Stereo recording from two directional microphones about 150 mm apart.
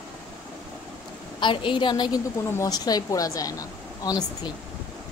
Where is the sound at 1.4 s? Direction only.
35° left (ahead or behind).